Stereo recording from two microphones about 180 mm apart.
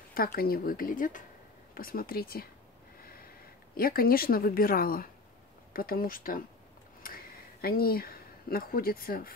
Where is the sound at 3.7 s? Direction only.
55° left (ahead or behind).